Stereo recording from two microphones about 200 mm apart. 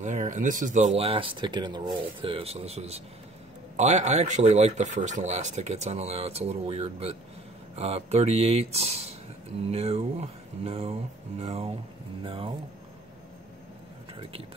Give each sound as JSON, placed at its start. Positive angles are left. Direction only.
{"t": 0.0, "sound": "speech", "side_deg": -40}